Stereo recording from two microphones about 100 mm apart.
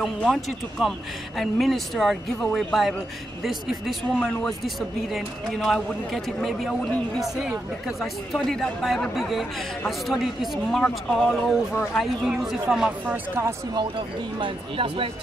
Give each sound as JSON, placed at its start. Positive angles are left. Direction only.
{"t": 0.0, "sound": "speech", "side_deg": 5}
{"t": 8.0, "sound": "speech", "side_deg": 5}
{"t": 13.0, "sound": "speech", "side_deg": -15}
{"t": 13.7, "sound": "speech", "side_deg": -55}